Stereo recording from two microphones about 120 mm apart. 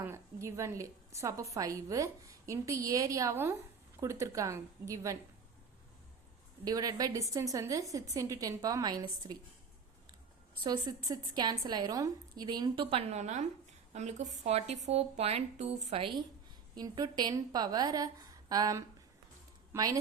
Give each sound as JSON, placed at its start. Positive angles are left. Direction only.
{"t": 0.0, "sound": "a woman's voice", "side_deg": -25}
{"t": 6.7, "sound": "a woman's voice", "side_deg": -30}
{"t": 10.6, "sound": "a woman's voice", "side_deg": -35}
{"t": 16.7, "sound": "a woman's voice", "side_deg": -35}